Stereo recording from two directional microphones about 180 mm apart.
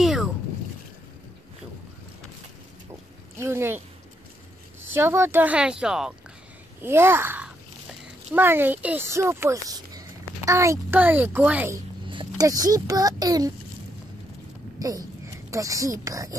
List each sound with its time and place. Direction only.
0.0 s boat: 5° right (ahead or behind)
3.3 s speech: 15° right (ahead or behind)
4.9 s a child's voice: 15° right (ahead or behind)
12.1 s speech: 25° right (ahead or behind)
14.8 s speech: 20° right (ahead or behind)